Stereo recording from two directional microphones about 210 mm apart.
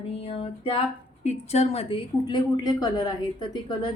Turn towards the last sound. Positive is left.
turn(degrees=20)  # may be behind; listen again after turning